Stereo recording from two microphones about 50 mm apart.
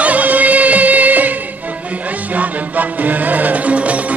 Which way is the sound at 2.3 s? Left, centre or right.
Right.